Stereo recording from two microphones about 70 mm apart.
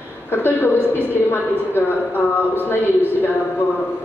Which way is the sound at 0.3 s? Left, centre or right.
Left.